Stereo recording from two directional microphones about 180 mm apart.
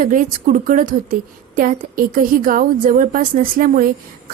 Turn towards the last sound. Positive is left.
turn(degrees=-55)  # may be behind; listen again after turning